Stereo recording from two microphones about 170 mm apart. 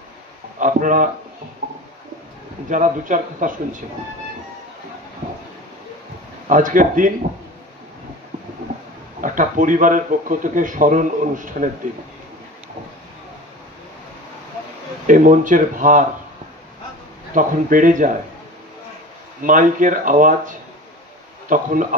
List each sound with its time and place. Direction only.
0.6 s a man's voice: 50° right (ahead or behind)
2.7 s a man's voice: 50° right (ahead or behind)
6.4 s a man's voice: 50° right (ahead or behind)
9.2 s a man's voice: 50° right (ahead or behind)
15.0 s a man's voice: 50° right (ahead or behind)
17.3 s a man's voice: 50° right (ahead or behind)
19.4 s a man's voice: 50° right (ahead or behind)